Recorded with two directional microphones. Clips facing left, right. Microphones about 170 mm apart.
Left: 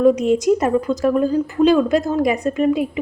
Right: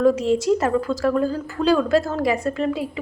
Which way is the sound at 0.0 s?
15° left (ahead or behind).